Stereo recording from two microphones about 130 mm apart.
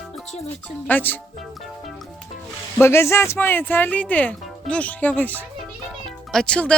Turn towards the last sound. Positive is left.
turn(degrees=10)  # may be behind; listen again after turning